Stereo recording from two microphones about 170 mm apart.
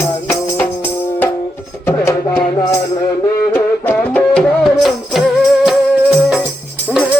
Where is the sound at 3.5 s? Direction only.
10° left (ahead or behind).